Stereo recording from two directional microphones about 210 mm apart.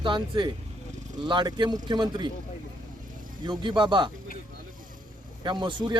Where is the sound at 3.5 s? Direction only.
20° right (ahead or behind).